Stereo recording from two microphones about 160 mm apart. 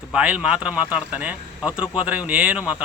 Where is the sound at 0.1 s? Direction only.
10° right (ahead or behind).